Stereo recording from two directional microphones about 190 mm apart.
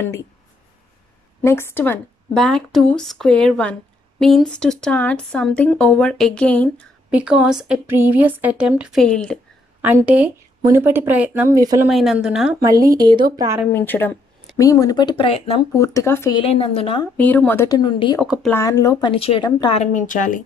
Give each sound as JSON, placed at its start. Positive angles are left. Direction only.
{"t": 1.4, "sound": "speech", "side_deg": 10}
{"t": 7.1, "sound": "speech", "side_deg": -5}
{"t": 9.8, "sound": "speech", "side_deg": -10}
{"t": 11.9, "sound": "speech", "side_deg": 0}
{"t": 12.9, "sound": "a woman's voice", "side_deg": -20}
{"t": 13.7, "sound": "a woman's voice", "side_deg": 10}
{"t": 15.7, "sound": "speech", "side_deg": 15}
{"t": 16.3, "sound": "a woman's voice", "side_deg": 30}
{"t": 17.2, "sound": "a woman's voice", "side_deg": 10}
{"t": 18.2, "sound": "speech", "side_deg": 0}
{"t": 18.5, "sound": "a woman's voice", "side_deg": 15}
{"t": 19.8, "sound": "a woman's voice", "side_deg": 45}